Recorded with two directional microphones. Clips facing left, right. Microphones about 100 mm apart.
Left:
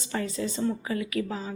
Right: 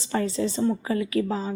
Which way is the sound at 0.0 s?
30° right (ahead or behind).